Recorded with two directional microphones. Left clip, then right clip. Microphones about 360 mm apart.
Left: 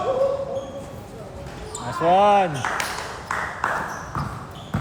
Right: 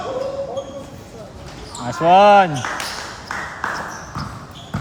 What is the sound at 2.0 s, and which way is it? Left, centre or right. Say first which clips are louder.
Speech: right 6 dB; right.